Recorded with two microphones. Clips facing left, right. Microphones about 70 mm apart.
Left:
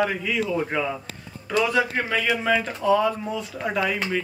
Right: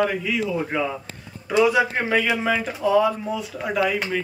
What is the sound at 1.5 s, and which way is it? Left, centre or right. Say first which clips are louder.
A man's voice: right 4 dB; centre.